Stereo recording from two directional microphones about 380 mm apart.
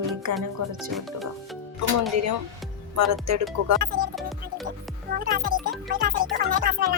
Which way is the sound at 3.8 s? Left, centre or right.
Right.